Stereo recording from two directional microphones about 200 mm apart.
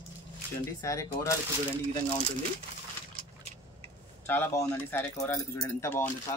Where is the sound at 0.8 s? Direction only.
15° left (ahead or behind).